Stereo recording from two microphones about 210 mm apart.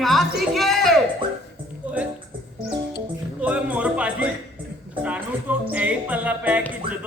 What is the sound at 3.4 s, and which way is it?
Music, 5° right (ahead or behind).